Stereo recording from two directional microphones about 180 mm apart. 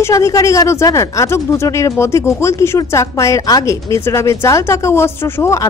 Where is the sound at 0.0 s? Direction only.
15° left (ahead or behind).